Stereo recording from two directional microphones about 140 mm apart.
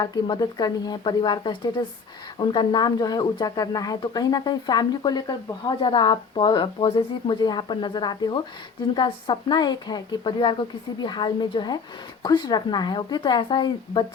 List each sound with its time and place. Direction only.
0.0 s speech: 30° left (ahead or behind)
7.4 s speech: 30° left (ahead or behind)